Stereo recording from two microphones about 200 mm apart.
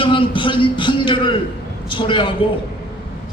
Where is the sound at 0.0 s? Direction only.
25° left (ahead or behind).